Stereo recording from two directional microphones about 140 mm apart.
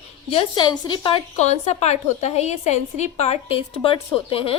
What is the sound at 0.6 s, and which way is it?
Speech, 30° left (ahead or behind).